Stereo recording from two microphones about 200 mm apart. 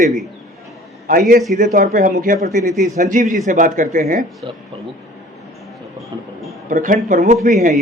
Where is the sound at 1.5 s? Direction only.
40° right (ahead or behind).